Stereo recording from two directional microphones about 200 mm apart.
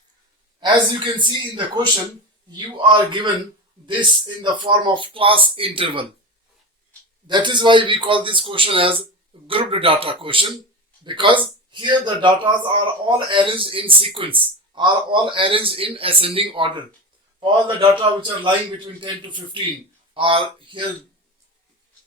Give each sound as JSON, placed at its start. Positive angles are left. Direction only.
{"t": 0.6, "sound": "speech", "side_deg": -25}
{"t": 7.3, "sound": "speech", "side_deg": -25}